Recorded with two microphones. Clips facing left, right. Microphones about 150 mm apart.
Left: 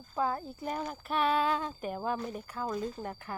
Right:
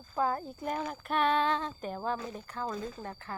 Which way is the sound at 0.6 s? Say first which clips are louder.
Right 1 dB; centre (ahead or behind).